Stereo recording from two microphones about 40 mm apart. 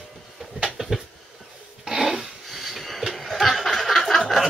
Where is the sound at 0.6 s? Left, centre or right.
Centre.